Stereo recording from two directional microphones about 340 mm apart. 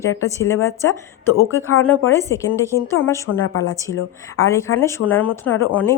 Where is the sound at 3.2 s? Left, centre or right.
Left.